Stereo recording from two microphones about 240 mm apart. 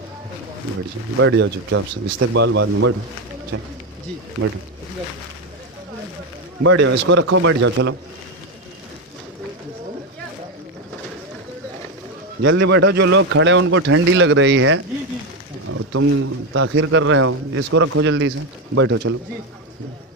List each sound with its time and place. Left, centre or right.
1.2 s speech: right
6.6 s speech: right
12.4 s speech: right
15.7 s speech: right